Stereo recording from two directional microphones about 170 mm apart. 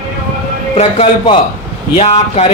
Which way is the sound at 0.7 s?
35° left (ahead or behind).